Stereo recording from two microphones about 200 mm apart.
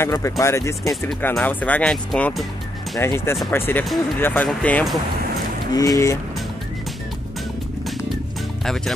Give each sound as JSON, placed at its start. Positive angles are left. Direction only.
{"t": 0.0, "sound": "speech", "side_deg": 15}
{"t": 1.0, "sound": "speech", "side_deg": 5}
{"t": 5.7, "sound": "speech", "side_deg": 15}